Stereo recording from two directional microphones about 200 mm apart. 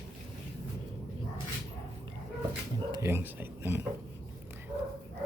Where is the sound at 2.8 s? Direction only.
20° right (ahead or behind).